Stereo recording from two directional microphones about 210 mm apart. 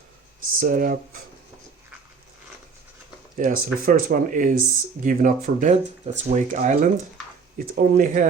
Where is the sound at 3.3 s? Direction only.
40° right (ahead or behind).